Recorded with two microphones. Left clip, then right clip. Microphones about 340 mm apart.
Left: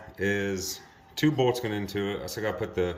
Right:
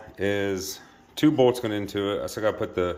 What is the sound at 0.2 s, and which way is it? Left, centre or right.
Speech, centre.